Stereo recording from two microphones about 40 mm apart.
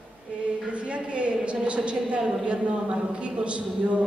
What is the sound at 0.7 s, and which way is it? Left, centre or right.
A man's voice, right.